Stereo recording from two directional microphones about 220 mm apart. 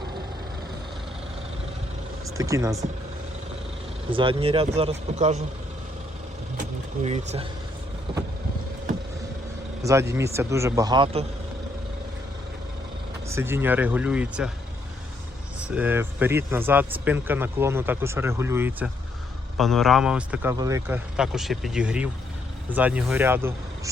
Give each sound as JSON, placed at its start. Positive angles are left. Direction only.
{"t": 2.2, "sound": "speech", "side_deg": -15}
{"t": 4.1, "sound": "speech", "side_deg": -25}
{"t": 7.0, "sound": "speech", "side_deg": -30}
{"t": 9.8, "sound": "speech", "side_deg": -15}
{"t": 13.2, "sound": "speech", "side_deg": -10}
{"t": 15.7, "sound": "speech", "side_deg": -5}
{"t": 19.5, "sound": "a man's voice", "side_deg": 0}